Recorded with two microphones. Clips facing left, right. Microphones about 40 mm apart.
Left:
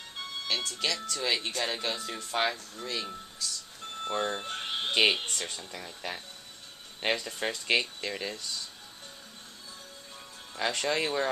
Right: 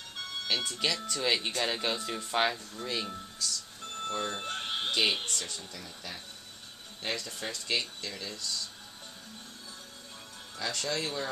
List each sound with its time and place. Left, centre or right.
0.5 s speech: centre
3.3 s a sound: centre
4.1 s speech: centre
4.4 s a sound: centre
5.1 s speech: centre
5.5 s speech: left
10.6 s speech: left